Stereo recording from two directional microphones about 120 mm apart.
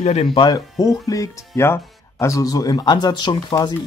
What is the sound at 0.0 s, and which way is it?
Speech, 60° left (ahead or behind).